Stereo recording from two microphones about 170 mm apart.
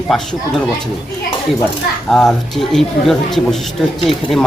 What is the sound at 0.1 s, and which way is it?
Speech, centre (ahead or behind).